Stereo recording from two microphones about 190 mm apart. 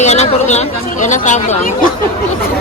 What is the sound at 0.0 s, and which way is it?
Speech, 35° left (ahead or behind).